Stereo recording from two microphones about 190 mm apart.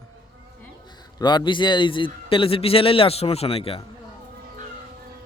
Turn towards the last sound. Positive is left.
turn(degrees=30)  # may be behind; listen again after turning